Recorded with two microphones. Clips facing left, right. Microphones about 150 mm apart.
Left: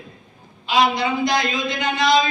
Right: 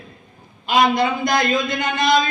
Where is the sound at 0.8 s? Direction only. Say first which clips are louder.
Right 1 dB; 50° right (ahead or behind).